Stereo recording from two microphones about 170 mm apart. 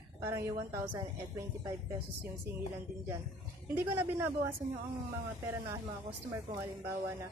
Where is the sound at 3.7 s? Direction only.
15° right (ahead or behind).